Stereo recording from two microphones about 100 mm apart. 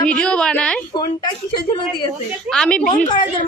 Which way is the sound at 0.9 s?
45° left (ahead or behind).